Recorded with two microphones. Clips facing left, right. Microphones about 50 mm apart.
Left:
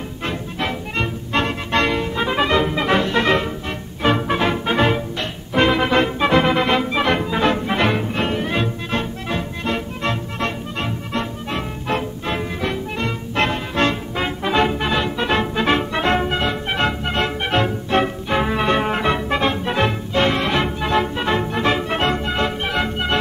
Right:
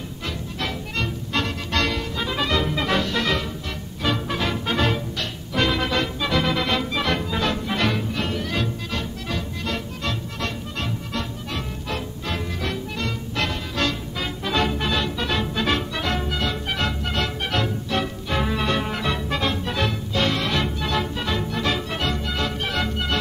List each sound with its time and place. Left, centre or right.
0.3 s music: left
5.5 s organ: left
13.4 s music: left